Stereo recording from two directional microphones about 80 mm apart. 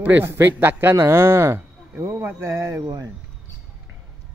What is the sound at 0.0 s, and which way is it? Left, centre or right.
Speech, right.